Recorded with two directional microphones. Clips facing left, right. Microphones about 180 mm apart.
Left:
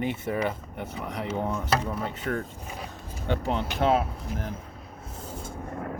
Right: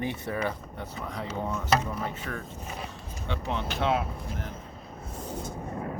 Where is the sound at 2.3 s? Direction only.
40° left (ahead or behind).